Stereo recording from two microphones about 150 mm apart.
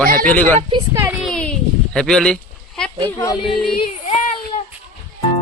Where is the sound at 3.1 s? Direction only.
15° left (ahead or behind).